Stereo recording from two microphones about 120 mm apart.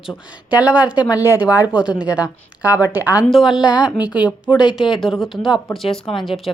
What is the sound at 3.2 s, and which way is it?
A woman's voice, centre (ahead or behind).